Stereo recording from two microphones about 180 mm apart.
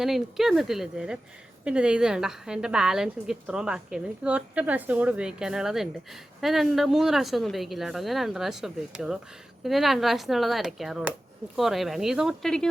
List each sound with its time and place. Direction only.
0.0 s a woman's voice: centre (ahead or behind)